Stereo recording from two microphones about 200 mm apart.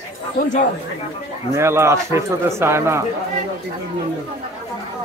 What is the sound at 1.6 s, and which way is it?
Speech, 15° right (ahead or behind).